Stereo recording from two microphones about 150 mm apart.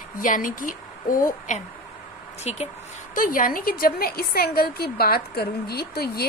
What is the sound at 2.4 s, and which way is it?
Speech, 45° left (ahead or behind).